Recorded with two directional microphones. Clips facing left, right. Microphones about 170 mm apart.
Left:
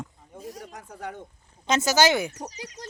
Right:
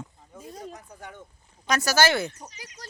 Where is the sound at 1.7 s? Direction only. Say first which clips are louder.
Left 2 dB; 20° left (ahead or behind).